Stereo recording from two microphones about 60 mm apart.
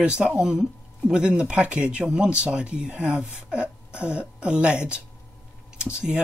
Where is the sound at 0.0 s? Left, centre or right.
Centre.